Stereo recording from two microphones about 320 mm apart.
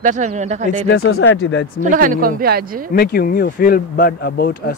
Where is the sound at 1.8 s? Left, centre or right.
Right.